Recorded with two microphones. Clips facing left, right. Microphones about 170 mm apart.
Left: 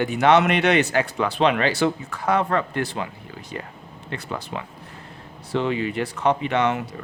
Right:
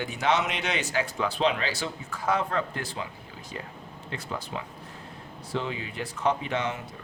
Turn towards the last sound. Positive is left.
turn(degrees=70)  # may be behind; listen again after turning